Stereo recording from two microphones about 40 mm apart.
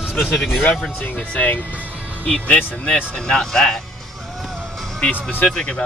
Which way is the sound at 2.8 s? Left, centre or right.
Left.